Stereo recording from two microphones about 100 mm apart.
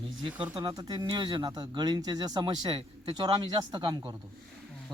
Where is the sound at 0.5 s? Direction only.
45° right (ahead or behind).